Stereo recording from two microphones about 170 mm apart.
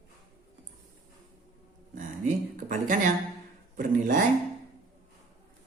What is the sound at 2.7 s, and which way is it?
Mantra, 50° right (ahead or behind).